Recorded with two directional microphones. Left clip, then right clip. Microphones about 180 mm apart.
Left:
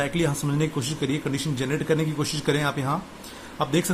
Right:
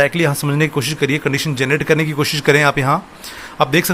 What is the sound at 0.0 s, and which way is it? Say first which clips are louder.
A man's voice: right 10 dB; 20° right (ahead or behind).